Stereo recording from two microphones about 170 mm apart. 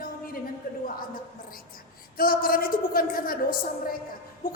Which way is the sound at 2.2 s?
60° left (ahead or behind).